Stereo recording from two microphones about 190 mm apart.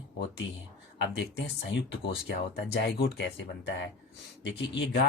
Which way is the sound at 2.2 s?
60° left (ahead or behind).